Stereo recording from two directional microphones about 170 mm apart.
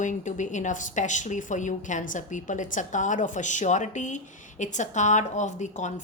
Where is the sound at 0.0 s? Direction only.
45° left (ahead or behind).